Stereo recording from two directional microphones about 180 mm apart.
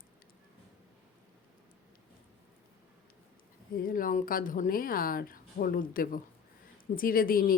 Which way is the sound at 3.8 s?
50° left (ahead or behind).